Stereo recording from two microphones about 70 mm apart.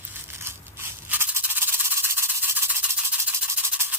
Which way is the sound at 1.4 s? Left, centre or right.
Right.